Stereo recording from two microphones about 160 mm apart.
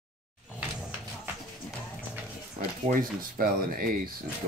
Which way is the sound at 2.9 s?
60° right (ahead or behind).